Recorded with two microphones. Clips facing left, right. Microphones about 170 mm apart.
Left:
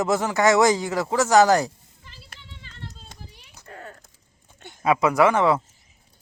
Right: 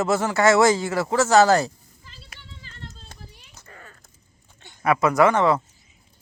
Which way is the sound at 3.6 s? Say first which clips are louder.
Left 7 dB; 65° left (ahead or behind).